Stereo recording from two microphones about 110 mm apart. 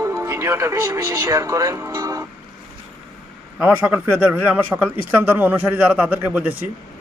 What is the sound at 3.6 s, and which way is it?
Speech, 15° right (ahead or behind).